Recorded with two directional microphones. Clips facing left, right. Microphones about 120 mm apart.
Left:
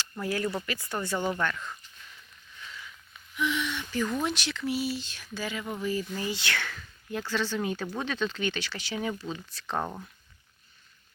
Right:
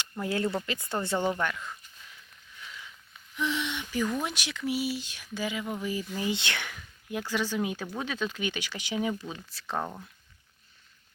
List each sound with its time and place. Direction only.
0.0 s speech: 25° right (ahead or behind)
1.4 s speech: 10° right (ahead or behind)
2.6 s a sound: 10° right (ahead or behind)
3.3 s speech: 30° right (ahead or behind)
3.7 s speech: 15° right (ahead or behind)